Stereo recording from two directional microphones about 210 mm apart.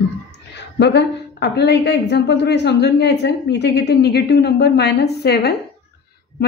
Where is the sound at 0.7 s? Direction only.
55° left (ahead or behind).